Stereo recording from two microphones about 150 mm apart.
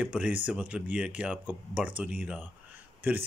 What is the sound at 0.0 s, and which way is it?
Speech, 10° right (ahead or behind).